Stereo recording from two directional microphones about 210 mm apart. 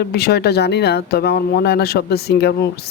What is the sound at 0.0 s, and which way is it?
Speech, 50° left (ahead or behind).